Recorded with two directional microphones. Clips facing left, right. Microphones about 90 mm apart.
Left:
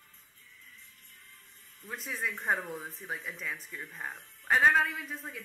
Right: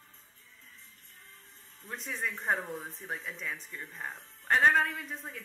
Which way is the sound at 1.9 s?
5° left (ahead or behind).